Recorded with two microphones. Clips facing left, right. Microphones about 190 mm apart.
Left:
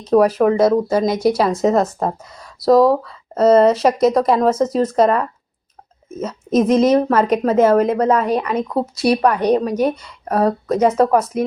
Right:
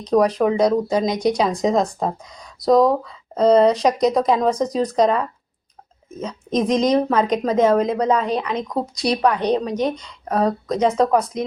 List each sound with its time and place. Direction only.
0.0 s a woman's voice: 5° left (ahead or behind)